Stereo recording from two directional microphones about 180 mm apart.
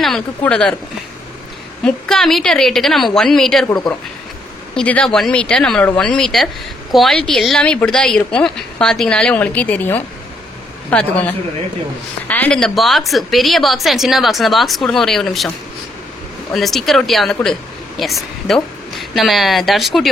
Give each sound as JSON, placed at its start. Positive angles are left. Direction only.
{"t": 0.0, "sound": "speech", "side_deg": 5}
{"t": 1.9, "sound": "speech", "side_deg": 0}
{"t": 3.6, "sound": "a woman's voice", "side_deg": 20}
{"t": 4.7, "sound": "speech", "side_deg": 5}
{"t": 16.5, "sound": "speech", "side_deg": 0}